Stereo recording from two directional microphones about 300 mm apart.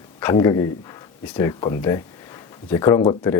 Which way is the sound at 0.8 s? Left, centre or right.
Centre.